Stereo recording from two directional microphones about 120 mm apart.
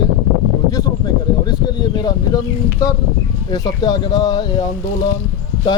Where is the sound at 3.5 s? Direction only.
30° left (ahead or behind).